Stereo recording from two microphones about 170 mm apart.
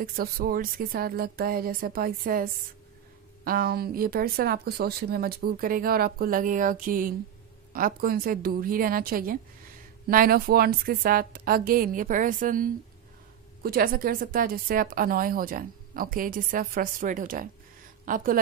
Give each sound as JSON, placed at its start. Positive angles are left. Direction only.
{"t": 0.0, "sound": "speech", "side_deg": -60}
{"t": 3.4, "sound": "a woman's voice", "side_deg": -60}